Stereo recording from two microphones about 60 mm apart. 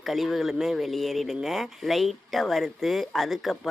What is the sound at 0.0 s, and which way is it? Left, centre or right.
Speech, centre.